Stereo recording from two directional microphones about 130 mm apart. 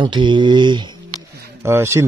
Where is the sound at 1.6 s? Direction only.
20° right (ahead or behind).